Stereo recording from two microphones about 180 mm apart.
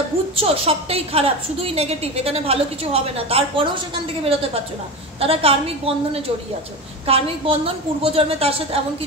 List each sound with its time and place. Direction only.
0.4 s a woman's voice: 30° right (ahead or behind)